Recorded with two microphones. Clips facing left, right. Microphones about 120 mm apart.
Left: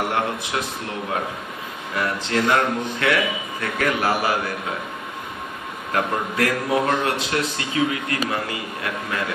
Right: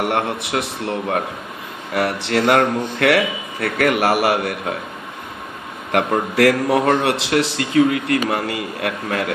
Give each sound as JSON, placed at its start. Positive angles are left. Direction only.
{"t": 0.0, "sound": "speech", "side_deg": -70}
{"t": 2.0, "sound": "speech", "side_deg": -75}
{"t": 5.9, "sound": "speech", "side_deg": -80}
{"t": 7.1, "sound": "speech", "side_deg": -90}